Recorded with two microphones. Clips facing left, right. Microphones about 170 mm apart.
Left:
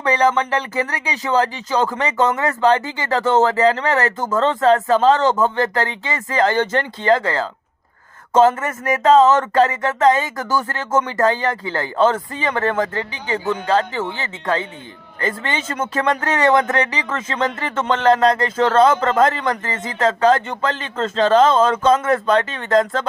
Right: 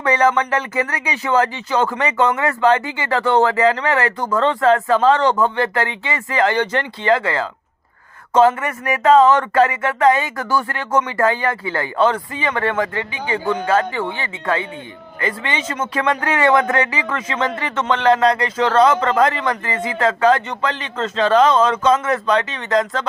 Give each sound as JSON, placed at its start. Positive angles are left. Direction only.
{"t": 0.0, "sound": "speech", "side_deg": 35}
{"t": 8.4, "sound": "speech", "side_deg": 40}
{"t": 15.2, "sound": "a man's voice", "side_deg": 45}
{"t": 17.7, "sound": "a man's voice", "side_deg": 40}